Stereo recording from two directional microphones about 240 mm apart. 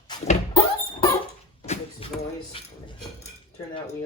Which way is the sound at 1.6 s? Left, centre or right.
Left.